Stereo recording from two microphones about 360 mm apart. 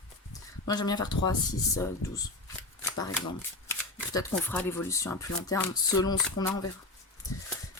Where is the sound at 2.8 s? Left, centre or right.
Centre.